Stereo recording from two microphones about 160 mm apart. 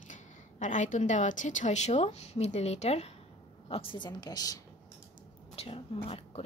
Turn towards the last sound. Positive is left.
turn(degrees=35)  # may be behind; listen again after turning